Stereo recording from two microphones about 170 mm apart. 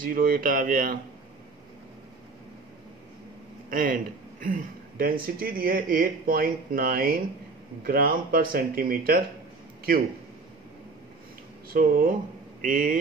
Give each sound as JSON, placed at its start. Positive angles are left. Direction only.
{"t": 0.0, "sound": "speech", "side_deg": -55}
{"t": 3.7, "sound": "speech", "side_deg": -55}
{"t": 11.7, "sound": "speech", "side_deg": -55}